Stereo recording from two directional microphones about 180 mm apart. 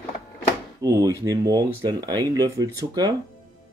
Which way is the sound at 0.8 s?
20° right (ahead or behind).